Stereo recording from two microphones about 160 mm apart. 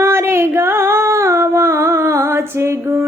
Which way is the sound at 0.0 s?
15° right (ahead or behind).